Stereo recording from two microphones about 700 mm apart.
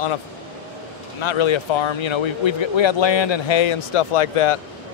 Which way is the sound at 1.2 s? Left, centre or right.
Left.